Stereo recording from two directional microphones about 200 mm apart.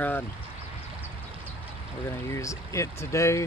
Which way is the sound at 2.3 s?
15° left (ahead or behind).